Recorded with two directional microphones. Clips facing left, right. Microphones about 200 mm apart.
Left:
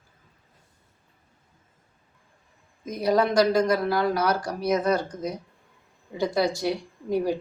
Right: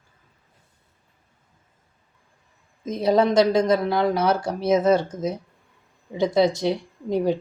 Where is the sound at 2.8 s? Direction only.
25° right (ahead or behind).